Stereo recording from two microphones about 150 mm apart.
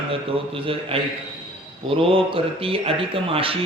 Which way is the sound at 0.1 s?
35° right (ahead or behind).